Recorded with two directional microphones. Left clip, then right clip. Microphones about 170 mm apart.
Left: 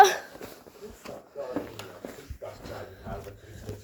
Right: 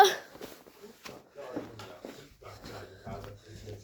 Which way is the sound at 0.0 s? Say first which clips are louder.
Left 4 dB; 10° left (ahead or behind).